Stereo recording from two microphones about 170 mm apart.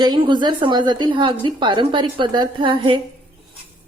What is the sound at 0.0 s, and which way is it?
A woman's voice, 25° right (ahead or behind).